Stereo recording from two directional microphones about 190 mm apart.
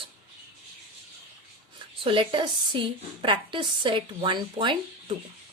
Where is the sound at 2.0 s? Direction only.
25° right (ahead or behind).